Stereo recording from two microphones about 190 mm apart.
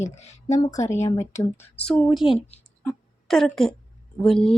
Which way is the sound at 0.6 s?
15° left (ahead or behind).